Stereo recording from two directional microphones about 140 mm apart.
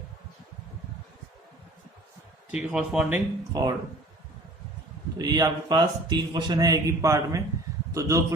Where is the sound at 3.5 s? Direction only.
25° right (ahead or behind).